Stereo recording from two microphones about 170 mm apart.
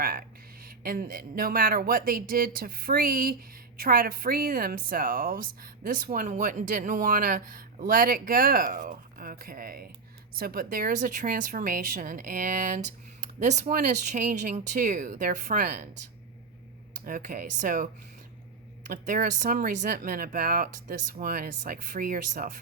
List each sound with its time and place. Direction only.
0.0 s a woman's voice: 60° right (ahead or behind)
17.1 s speech: 55° right (ahead or behind)
18.9 s a woman's voice: 55° right (ahead or behind)